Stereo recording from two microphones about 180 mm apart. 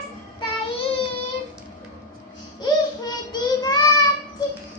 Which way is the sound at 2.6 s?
25° left (ahead or behind).